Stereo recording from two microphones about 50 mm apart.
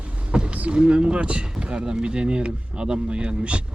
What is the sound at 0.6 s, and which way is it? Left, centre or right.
Speech, right.